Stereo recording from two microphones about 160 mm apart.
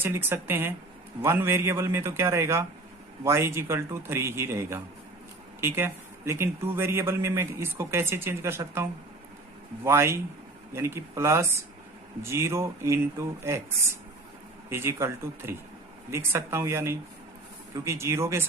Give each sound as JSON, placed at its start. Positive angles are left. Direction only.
{"t": 0.0, "sound": "a man's voice", "side_deg": -15}